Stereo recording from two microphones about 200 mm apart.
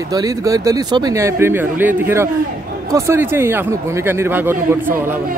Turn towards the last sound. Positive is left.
turn(degrees=-10)  # may be behind; listen again after turning